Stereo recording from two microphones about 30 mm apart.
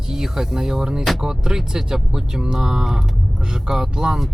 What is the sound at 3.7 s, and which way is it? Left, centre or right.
Speech, centre.